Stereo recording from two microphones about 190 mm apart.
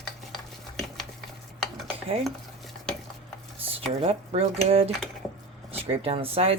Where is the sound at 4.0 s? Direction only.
30° right (ahead or behind).